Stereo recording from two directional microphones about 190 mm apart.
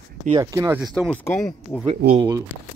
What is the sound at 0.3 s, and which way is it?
Speech, 20° right (ahead or behind).